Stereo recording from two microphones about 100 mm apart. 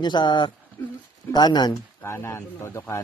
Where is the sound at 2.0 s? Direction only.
25° left (ahead or behind).